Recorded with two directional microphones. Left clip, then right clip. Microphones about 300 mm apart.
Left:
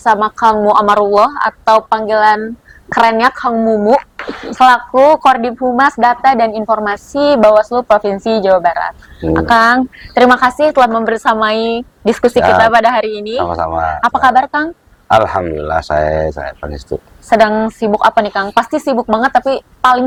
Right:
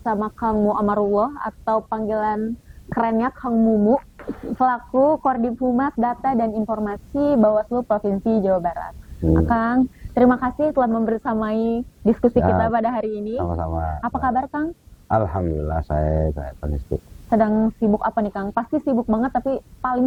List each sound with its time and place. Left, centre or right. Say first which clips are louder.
0.0 s a woman's voice: left 13 dB; centre
1.3 s speech: left 12 dB; centre
4.2 s speech: left 11 dB; centre
7.7 s a woman's voice: left 10 dB; left
7.9 s speech: left 9 dB; centre
13.5 s speech: left 12 dB; centre